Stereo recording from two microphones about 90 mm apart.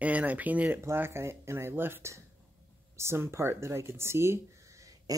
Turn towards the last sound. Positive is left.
turn(degrees=-40)  # may be behind; listen again after turning